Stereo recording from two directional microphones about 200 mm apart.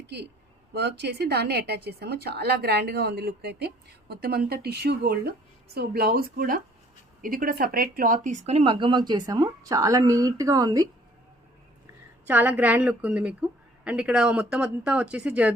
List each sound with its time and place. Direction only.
0.7 s a woman's voice: 55° right (ahead or behind); by 10.8 s 20° right (ahead or behind)
12.3 s a woman's voice: 10° right (ahead or behind)